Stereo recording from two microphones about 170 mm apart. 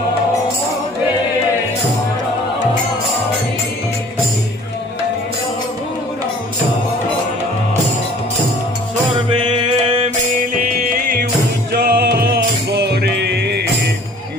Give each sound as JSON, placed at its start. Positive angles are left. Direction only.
{"t": 9.4, "sound": "music", "side_deg": -30}
{"t": 10.7, "sound": "music", "side_deg": -55}